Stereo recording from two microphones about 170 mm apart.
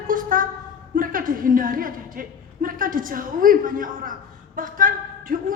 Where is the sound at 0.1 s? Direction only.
55° right (ahead or behind).